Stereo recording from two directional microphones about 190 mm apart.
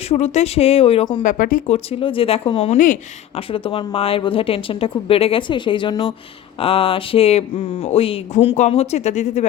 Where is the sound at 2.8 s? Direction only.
45° left (ahead or behind).